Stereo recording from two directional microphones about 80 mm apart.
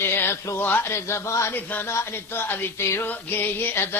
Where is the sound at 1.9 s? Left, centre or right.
Left.